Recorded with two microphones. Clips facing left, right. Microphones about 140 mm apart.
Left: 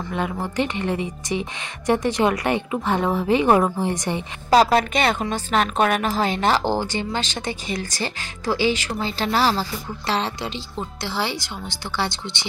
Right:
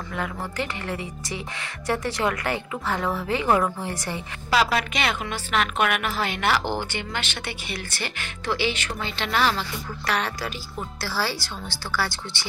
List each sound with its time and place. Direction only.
0.1 s a woman's voice: 20° left (ahead or behind)
4.5 s a woman's voice: 40° left (ahead or behind); by 12.4 s 20° left (ahead or behind)